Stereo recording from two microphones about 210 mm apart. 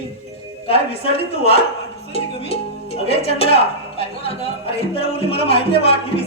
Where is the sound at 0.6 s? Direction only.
25° left (ahead or behind).